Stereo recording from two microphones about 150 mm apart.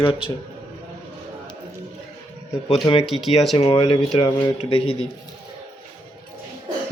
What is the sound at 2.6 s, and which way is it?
Speech, 35° left (ahead or behind).